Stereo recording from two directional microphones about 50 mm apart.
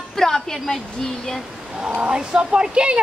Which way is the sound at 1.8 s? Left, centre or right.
Centre.